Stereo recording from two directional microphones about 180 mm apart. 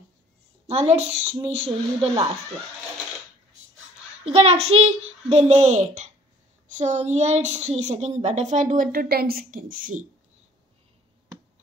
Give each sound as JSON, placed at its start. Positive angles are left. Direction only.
{"t": 0.7, "sound": "a woman's voice", "side_deg": -35}
{"t": 4.2, "sound": "a woman's voice", "side_deg": -30}
{"t": 8.9, "sound": "a woman's voice", "side_deg": -55}